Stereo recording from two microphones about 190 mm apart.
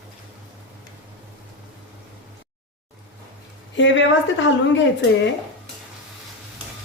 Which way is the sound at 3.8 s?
75° left (ahead or behind).